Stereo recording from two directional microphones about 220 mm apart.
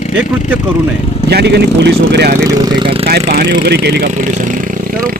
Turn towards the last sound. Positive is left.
turn(degrees=-45)  # may be behind; listen again after turning